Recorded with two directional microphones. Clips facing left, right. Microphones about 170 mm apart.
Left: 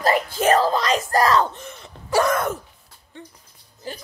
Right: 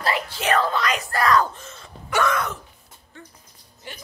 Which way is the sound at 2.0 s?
40° left (ahead or behind).